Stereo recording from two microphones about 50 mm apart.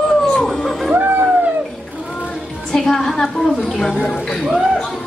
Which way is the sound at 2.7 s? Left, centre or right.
Centre.